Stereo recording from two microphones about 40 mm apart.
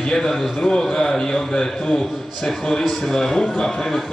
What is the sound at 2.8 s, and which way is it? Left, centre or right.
Speech, centre.